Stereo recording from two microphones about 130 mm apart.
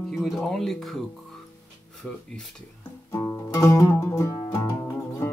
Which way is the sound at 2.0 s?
10° left (ahead or behind).